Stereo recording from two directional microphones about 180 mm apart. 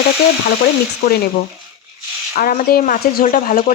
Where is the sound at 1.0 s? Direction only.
60° left (ahead or behind).